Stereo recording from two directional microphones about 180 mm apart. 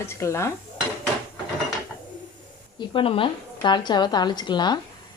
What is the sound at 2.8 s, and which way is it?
A woman's voice, 30° left (ahead or behind).